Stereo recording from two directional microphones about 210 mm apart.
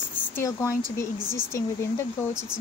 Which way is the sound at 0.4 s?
15° left (ahead or behind).